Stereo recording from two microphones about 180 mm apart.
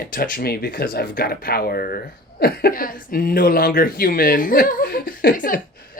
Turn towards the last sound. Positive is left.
turn(degrees=50)  # may be behind; listen again after turning